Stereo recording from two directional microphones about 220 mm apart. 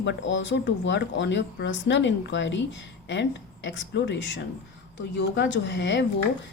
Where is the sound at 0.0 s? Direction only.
55° left (ahead or behind).